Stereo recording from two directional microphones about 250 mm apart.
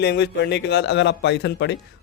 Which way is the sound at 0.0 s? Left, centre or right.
Left.